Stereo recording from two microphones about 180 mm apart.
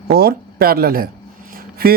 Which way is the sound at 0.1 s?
60° right (ahead or behind).